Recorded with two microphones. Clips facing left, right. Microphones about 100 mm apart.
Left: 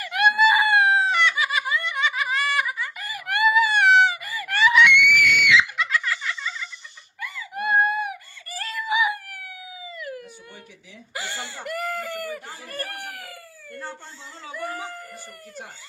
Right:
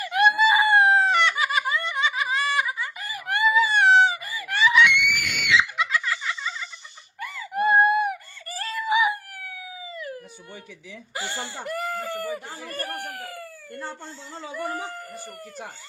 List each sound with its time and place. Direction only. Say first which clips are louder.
0.0 s chicken: even; 25° right (ahead or behind)
5.4 s screaming: left 2 dB; 30° right (ahead or behind)
7.2 s fowl: right 5 dB; 35° right (ahead or behind)
11.1 s a sound: right 1 dB; 30° right (ahead or behind)
14.5 s howl: right 1 dB; 30° right (ahead or behind)